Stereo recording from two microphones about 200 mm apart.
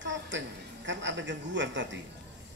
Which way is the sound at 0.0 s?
65° right (ahead or behind).